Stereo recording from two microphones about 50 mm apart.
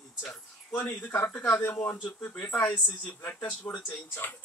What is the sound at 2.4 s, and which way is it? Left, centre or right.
Speech, left.